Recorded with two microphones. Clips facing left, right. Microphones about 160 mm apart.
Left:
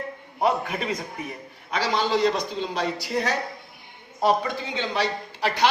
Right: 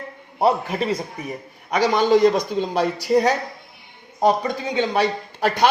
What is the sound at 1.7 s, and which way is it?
A man's voice, 55° right (ahead or behind).